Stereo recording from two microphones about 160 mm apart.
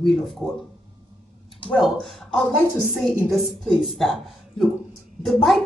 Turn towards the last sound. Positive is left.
turn(degrees=0)  # may be behind; listen again after turning